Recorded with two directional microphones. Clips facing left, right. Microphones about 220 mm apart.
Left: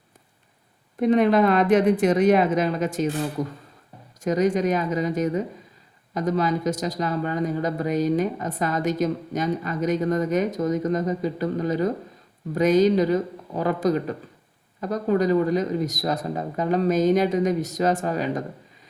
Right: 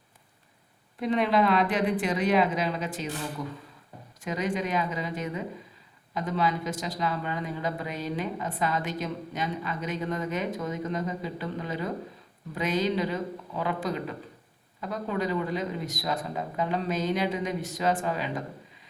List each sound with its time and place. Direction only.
0.9 s speech: 50° left (ahead or behind)